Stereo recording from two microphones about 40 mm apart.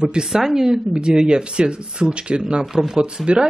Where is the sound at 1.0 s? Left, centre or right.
Right.